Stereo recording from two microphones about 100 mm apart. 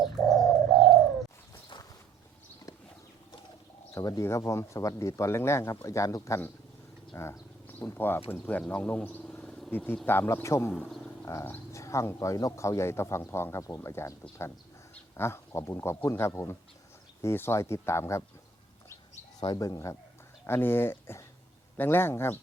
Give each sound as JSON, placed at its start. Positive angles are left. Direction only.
{"t": 0.0, "sound": "bird", "side_deg": 0}
{"t": 3.9, "sound": "a man's voice", "side_deg": 35}
{"t": 8.7, "sound": "a sound", "side_deg": 15}
{"t": 9.7, "sound": "speech", "side_deg": 20}
{"t": 10.8, "sound": "speech", "side_deg": 5}
{"t": 11.3, "sound": "speech", "side_deg": 30}
{"t": 19.4, "sound": "a man's voice", "side_deg": 40}
{"t": 20.5, "sound": "speech", "side_deg": 20}